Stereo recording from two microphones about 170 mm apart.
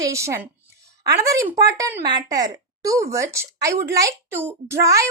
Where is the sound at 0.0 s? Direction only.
15° right (ahead or behind).